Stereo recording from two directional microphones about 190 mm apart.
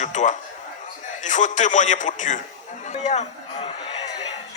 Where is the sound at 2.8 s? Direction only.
40° left (ahead or behind).